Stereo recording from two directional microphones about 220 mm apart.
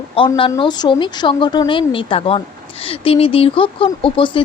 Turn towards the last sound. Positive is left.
turn(degrees=25)  # may be behind; listen again after turning